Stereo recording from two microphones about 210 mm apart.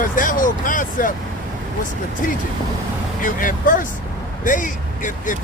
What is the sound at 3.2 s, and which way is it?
Speech, 40° left (ahead or behind).